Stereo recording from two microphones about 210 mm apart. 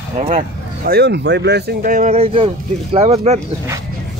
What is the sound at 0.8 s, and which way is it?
Speech, 50° right (ahead or behind).